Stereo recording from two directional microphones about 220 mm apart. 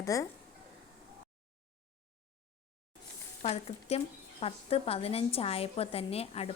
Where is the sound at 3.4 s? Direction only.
30° left (ahead or behind).